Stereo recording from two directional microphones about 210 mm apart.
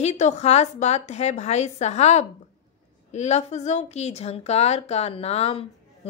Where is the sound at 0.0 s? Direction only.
30° left (ahead or behind).